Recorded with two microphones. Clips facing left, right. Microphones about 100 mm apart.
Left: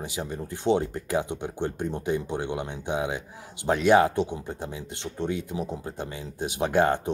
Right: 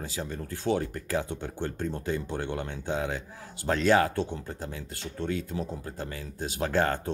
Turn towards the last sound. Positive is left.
turn(degrees=20)  # may be behind; listen again after turning